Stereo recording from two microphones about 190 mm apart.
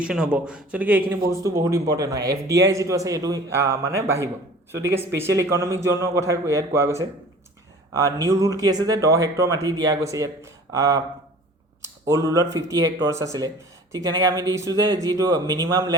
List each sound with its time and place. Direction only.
0.0 s speech: 5° right (ahead or behind)